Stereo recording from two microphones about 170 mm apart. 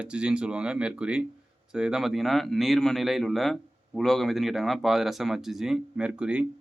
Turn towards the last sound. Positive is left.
turn(degrees=-5)  # may be behind; listen again after turning